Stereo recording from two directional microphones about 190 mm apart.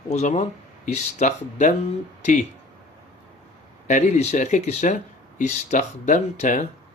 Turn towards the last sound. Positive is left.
turn(degrees=40)  # may be behind; listen again after turning